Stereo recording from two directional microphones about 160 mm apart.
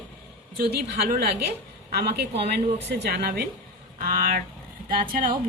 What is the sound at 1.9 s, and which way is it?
A woman's voice, 90° right.